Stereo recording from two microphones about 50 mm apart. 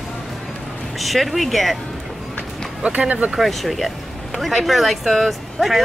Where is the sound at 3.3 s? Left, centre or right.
Centre.